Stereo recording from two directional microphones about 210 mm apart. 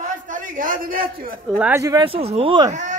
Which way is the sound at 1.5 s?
5° right (ahead or behind).